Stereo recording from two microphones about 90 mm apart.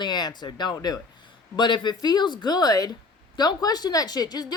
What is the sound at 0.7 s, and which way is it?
Speech, 45° left (ahead or behind).